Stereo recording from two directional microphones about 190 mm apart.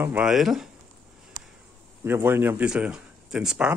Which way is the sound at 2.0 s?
10° right (ahead or behind).